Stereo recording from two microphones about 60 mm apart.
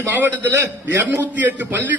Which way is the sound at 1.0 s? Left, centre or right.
Right.